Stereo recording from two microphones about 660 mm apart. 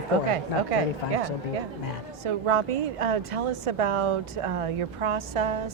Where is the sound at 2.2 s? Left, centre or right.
Right.